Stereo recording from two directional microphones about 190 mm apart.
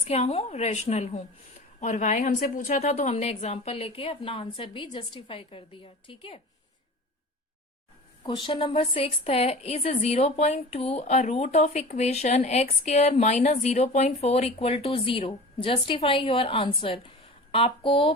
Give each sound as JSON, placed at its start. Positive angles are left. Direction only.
{"t": 0.0, "sound": "a woman's voice", "side_deg": 35}
{"t": 8.2, "sound": "a woman's voice", "side_deg": 25}